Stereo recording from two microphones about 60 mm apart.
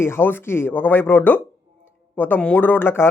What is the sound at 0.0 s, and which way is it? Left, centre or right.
A man's voice, left.